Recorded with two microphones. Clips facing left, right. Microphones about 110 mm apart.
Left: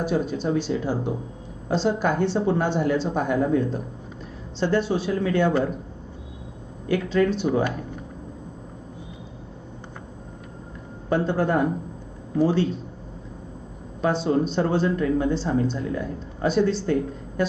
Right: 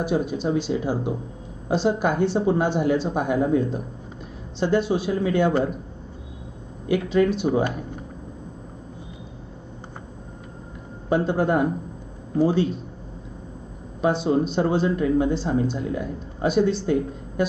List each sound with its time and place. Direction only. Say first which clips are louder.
0.0 s speech: right 1 dB; 15° right (ahead or behind)
6.8 s speech: right 1 dB; 15° right (ahead or behind)
11.1 s speech: right 1 dB; 15° right (ahead or behind)
14.0 s speech: right 1 dB; 15° right (ahead or behind)